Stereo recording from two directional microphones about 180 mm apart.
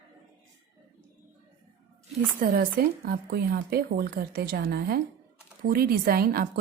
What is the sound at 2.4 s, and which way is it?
Speech, 50° right (ahead or behind).